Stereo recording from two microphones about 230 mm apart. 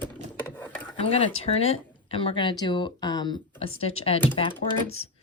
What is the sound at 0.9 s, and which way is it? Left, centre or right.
Speech, left.